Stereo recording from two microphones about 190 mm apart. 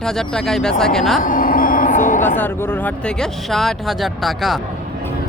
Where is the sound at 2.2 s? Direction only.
10° left (ahead or behind).